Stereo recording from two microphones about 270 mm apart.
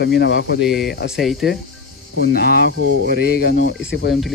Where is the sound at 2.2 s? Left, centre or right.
Left.